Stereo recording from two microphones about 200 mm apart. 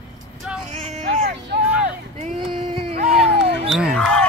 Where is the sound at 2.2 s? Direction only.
25° right (ahead or behind).